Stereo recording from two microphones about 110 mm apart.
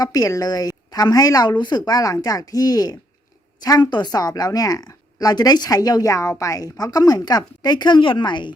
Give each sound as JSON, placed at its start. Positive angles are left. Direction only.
{"t": 0.0, "sound": "a woman's voice", "side_deg": 35}